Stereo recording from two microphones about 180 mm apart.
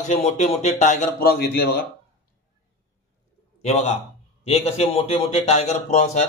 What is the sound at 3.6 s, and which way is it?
A man's voice, 40° left (ahead or behind).